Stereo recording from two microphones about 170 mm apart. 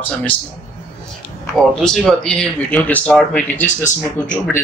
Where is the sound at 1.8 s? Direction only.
5° left (ahead or behind).